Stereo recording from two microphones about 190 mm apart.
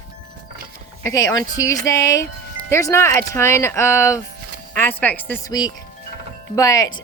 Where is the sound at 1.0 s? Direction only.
20° left (ahead or behind).